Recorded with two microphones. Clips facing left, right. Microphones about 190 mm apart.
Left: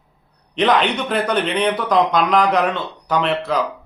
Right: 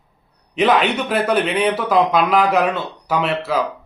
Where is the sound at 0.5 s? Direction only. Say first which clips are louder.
Right 1 dB; 5° right (ahead or behind).